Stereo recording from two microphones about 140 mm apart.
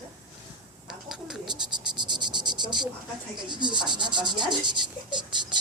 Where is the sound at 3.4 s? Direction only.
35° right (ahead or behind).